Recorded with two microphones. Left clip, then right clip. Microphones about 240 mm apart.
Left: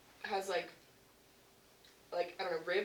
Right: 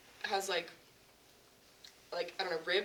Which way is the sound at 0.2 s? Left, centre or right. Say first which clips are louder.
Right 2 dB; right.